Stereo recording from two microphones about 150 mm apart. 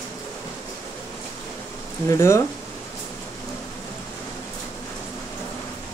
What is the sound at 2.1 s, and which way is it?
Speech, 20° left (ahead or behind).